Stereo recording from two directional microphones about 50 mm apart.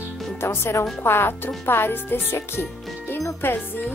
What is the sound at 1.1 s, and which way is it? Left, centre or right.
Speech, left.